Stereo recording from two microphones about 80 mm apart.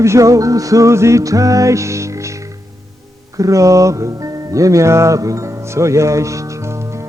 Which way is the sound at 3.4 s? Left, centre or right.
Right.